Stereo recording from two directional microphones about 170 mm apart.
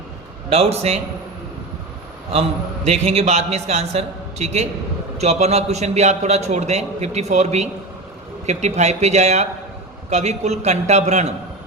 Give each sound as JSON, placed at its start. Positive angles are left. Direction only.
{"t": 0.5, "sound": "a man's voice", "side_deg": -35}
{"t": 2.3, "sound": "a man's voice", "side_deg": -35}